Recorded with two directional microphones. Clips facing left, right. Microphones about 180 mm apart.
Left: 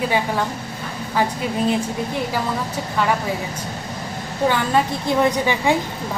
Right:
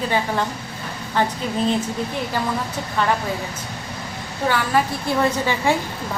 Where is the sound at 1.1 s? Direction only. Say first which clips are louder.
Even; 10° left (ahead or behind).